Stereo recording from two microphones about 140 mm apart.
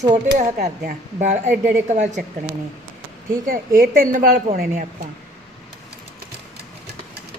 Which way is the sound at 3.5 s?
90° right.